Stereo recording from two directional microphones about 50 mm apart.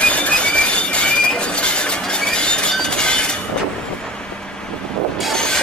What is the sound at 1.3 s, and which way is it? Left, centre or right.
Train, left.